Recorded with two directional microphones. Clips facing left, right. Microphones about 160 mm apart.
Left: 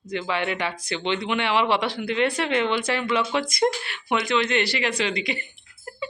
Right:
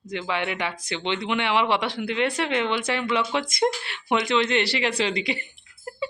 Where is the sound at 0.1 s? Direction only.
20° right (ahead or behind).